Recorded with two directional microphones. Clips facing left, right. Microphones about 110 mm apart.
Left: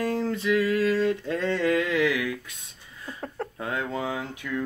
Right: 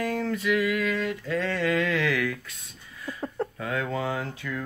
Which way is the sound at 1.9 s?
15° left (ahead or behind).